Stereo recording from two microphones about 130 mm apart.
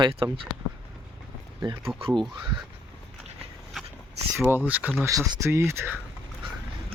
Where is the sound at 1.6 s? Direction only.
35° right (ahead or behind).